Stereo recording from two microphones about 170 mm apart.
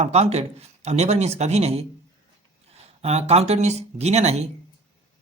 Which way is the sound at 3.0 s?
40° right (ahead or behind).